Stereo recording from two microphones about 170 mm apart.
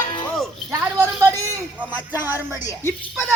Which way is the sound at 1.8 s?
10° right (ahead or behind).